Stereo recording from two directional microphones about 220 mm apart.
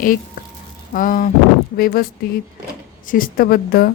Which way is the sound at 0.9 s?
40° left (ahead or behind).